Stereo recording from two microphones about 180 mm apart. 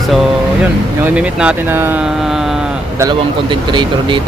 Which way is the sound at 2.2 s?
Centre (ahead or behind).